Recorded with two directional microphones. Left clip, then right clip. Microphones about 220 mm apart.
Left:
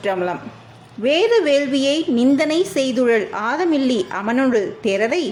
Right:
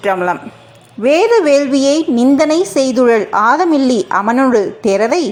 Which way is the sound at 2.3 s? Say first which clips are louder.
Right 6 dB; 15° right (ahead or behind).